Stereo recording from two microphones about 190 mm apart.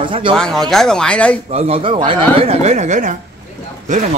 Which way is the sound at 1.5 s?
35° right (ahead or behind).